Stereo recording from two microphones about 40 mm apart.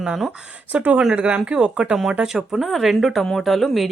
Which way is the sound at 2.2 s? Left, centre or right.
Centre.